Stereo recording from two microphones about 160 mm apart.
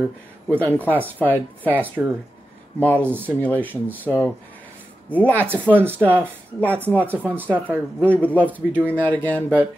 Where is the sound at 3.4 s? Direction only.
10° left (ahead or behind).